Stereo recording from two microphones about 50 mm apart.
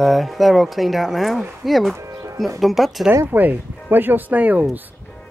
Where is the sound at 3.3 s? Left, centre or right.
Right.